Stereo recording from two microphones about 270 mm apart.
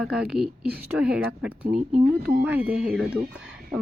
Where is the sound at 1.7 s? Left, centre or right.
Right.